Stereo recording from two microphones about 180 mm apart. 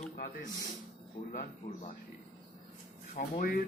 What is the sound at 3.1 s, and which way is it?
Speech, 45° left (ahead or behind).